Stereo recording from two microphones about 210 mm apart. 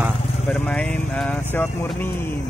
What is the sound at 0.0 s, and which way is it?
Vehicle, centre (ahead or behind).